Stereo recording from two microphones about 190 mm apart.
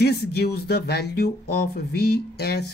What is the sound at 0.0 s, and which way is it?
Speech, 55° left (ahead or behind).